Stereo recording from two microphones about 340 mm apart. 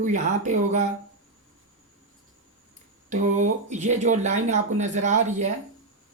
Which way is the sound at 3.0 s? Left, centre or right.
Right.